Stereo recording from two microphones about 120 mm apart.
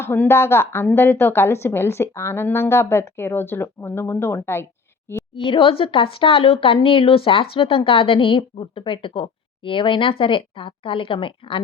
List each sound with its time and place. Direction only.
0.0 s a woman's voice: 20° left (ahead or behind)
5.3 s speech: 45° left (ahead or behind)